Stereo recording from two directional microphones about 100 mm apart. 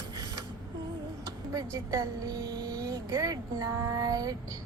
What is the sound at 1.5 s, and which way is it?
A woman's voice, 35° right (ahead or behind).